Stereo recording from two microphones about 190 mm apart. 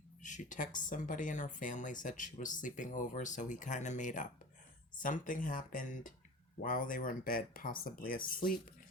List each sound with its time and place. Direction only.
0.2 s speech: 40° left (ahead or behind)